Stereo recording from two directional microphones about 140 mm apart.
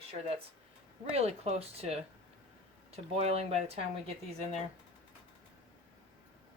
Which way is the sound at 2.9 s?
50° right (ahead or behind).